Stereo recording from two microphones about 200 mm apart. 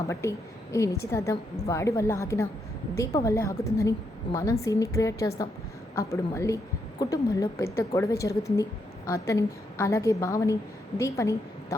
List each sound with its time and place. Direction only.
0.1 s a woman's voice: 15° left (ahead or behind)